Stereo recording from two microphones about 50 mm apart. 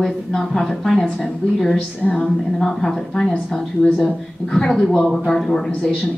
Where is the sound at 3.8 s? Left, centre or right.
Centre.